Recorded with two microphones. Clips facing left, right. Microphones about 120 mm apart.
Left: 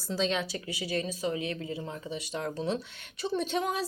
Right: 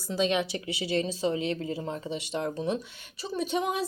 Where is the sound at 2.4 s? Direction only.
15° right (ahead or behind).